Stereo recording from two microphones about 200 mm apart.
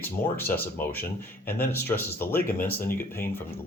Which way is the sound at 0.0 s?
10° left (ahead or behind).